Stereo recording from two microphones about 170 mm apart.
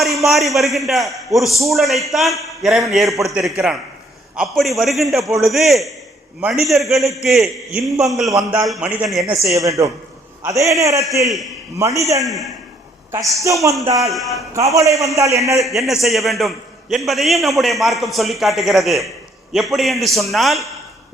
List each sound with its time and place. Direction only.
0.0 s a man's voice: centre (ahead or behind)
8.3 s a man's voice: 20° right (ahead or behind)
8.6 s a man's voice: 5° right (ahead or behind)
9.3 s a man's voice: 20° right (ahead or behind)
14.1 s a man's voice: centre (ahead or behind)
14.5 s a man's voice: 20° right (ahead or behind)
15.6 s a man's voice: centre (ahead or behind)